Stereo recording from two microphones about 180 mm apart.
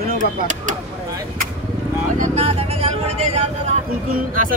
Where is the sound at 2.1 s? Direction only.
40° right (ahead or behind).